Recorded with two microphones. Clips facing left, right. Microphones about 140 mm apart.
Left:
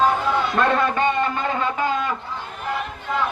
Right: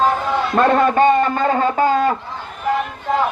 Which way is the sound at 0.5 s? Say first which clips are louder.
Right 9 dB; 40° right (ahead or behind).